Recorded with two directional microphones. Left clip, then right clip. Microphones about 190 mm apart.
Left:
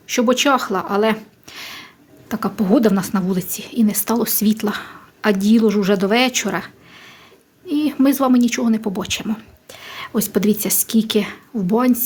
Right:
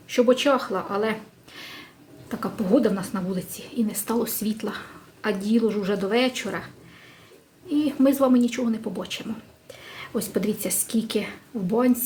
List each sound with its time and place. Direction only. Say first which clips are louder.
0.1 s speech: left 4 dB; 55° left (ahead or behind)